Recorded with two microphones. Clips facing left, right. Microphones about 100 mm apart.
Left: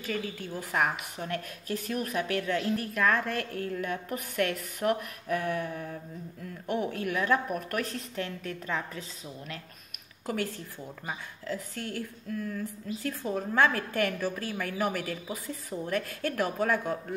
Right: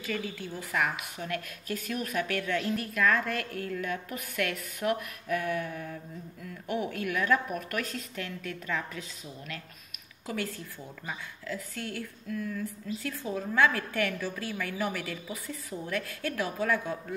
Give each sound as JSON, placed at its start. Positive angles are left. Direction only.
{"t": 0.0, "sound": "a woman's voice", "side_deg": 45}
{"t": 3.5, "sound": "a woman's voice", "side_deg": 35}
{"t": 10.2, "sound": "a woman's voice", "side_deg": 45}